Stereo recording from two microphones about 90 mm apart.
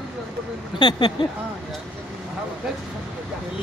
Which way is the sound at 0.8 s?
60° left (ahead or behind).